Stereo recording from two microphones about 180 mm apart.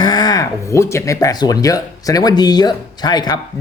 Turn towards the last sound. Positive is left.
turn(degrees=25)  # may be behind; listen again after turning